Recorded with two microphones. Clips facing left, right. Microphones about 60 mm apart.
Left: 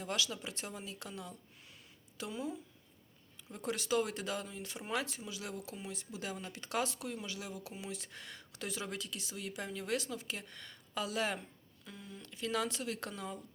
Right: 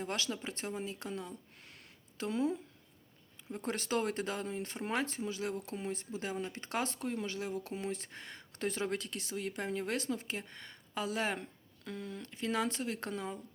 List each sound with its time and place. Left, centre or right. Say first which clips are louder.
0.0 s speech: right 1 dB; right
2.3 s speech: right 8 dB; right
3.6 s speech: even; right
11.9 s speech: right 8 dB; right
12.2 s speech: right 1 dB; right